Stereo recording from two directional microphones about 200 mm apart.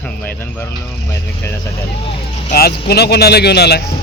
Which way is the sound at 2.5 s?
50° left (ahead or behind).